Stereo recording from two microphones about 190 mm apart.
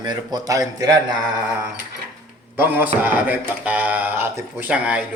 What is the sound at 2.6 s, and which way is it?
Speech, 10° right (ahead or behind).